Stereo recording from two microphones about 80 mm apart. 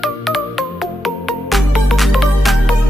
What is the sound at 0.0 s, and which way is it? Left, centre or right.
Music, centre.